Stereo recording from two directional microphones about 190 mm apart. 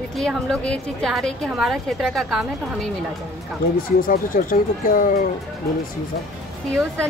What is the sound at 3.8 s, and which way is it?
Speech, 50° left (ahead or behind).